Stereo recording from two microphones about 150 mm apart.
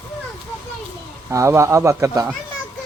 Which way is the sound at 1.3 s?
20° right (ahead or behind).